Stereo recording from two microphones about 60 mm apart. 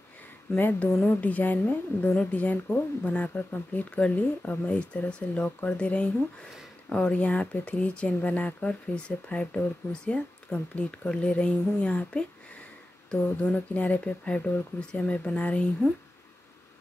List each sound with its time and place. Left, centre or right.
0.6 s a woman's voice: left
13.1 s a woman's voice: centre